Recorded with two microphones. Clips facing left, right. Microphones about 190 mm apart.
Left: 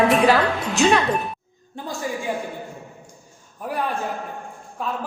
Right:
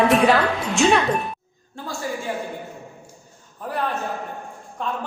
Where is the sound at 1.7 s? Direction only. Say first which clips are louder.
Left 1 dB; 20° left (ahead or behind).